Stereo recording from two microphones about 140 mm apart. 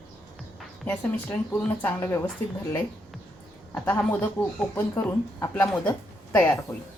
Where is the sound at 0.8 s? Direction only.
15° left (ahead or behind).